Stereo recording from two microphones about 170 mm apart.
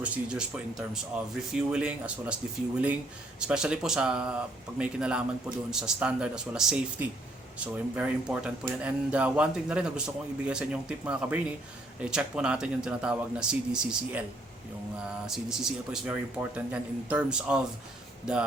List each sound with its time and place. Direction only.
0.0 s speech: 5° right (ahead or behind)
15.3 s speech: 5° right (ahead or behind)